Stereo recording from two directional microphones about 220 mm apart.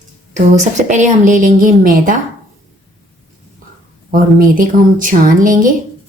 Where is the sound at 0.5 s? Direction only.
35° right (ahead or behind).